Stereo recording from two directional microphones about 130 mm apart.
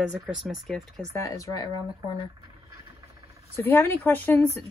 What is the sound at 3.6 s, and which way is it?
Speech, 15° left (ahead or behind).